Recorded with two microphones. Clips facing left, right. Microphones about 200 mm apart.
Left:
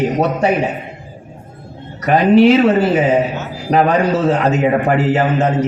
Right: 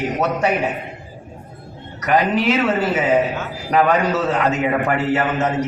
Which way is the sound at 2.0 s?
30° left (ahead or behind).